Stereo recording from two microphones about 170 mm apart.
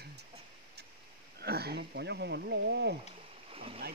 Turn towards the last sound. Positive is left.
turn(degrees=-35)  # may be behind; listen again after turning